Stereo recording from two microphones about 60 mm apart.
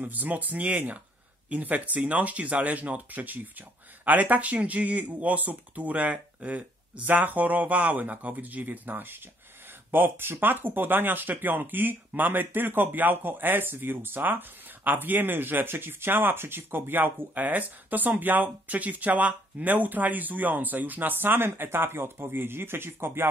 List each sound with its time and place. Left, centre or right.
0.0 s speech: right